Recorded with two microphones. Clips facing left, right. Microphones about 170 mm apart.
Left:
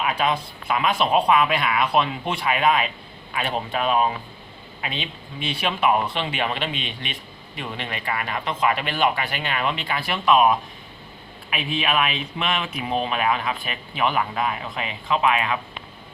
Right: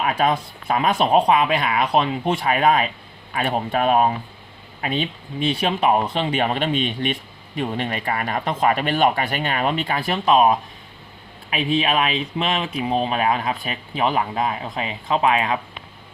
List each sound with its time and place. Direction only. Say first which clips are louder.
0.0 s speech: right 3 dB; 40° right (ahead or behind)